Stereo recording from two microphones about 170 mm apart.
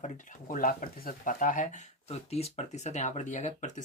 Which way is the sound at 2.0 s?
35° left (ahead or behind).